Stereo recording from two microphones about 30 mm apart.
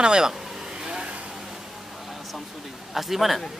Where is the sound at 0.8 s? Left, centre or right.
Right.